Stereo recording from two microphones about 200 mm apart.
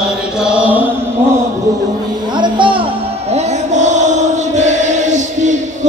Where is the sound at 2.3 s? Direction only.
25° right (ahead or behind).